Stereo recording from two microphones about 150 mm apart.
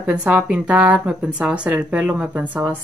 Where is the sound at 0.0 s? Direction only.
10° right (ahead or behind).